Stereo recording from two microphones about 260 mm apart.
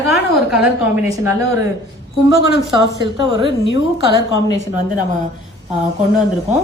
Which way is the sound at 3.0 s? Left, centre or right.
Centre.